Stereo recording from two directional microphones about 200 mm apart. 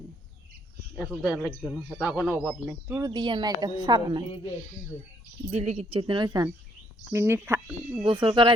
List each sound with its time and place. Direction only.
0.9 s a man's voice: centre (ahead or behind)
3.1 s speech: 25° right (ahead or behind)
5.5 s speech: 35° right (ahead or behind); by 8.0 s 10° right (ahead or behind)
8.0 s speech: 25° right (ahead or behind)